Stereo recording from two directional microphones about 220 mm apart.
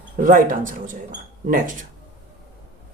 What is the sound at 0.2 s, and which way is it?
Speech, 35° right (ahead or behind).